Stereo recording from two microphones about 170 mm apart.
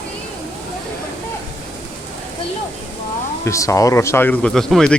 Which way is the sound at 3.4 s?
15° left (ahead or behind).